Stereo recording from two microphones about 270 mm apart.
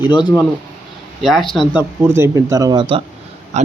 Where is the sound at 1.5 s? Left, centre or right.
Centre.